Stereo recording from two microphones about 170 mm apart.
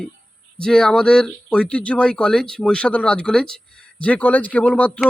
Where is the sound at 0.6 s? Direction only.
5° left (ahead or behind).